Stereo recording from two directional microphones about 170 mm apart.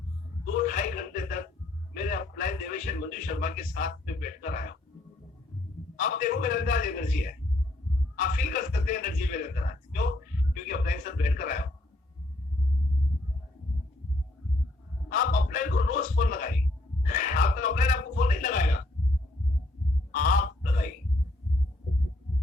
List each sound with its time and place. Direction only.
0.7 s speech: 50° left (ahead or behind)
6.0 s speech: 50° left (ahead or behind)
15.1 s speech: 50° left (ahead or behind)
20.1 s speech: 50° left (ahead or behind)